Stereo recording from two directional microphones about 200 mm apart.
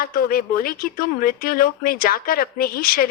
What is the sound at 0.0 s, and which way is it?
Speech, 45° left (ahead or behind).